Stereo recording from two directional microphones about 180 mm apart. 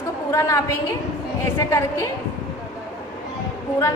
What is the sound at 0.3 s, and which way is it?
A woman's voice, 15° left (ahead or behind).